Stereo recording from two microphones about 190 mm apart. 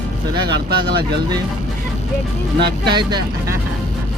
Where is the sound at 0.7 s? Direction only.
60° right (ahead or behind).